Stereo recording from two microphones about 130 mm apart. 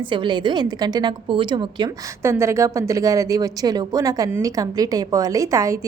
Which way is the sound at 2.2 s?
20° right (ahead or behind).